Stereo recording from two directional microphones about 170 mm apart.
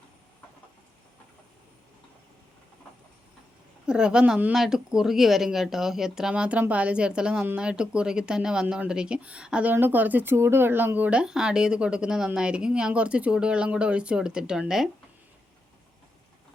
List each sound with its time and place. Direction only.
3.8 s speech: 5° right (ahead or behind)